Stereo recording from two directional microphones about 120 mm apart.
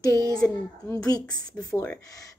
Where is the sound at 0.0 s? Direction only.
25° left (ahead or behind).